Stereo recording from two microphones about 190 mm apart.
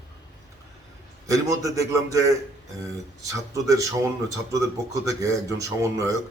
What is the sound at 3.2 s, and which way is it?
Speech, 15° right (ahead or behind).